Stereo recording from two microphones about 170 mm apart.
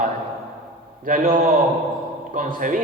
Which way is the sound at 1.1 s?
55° right (ahead or behind).